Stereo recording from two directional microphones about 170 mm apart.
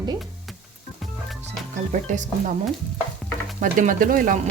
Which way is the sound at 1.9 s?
50° right (ahead or behind).